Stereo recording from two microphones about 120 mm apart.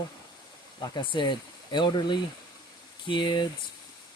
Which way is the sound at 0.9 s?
40° left (ahead or behind).